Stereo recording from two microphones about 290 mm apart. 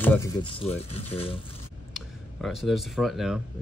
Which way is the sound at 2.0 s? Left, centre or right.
Centre.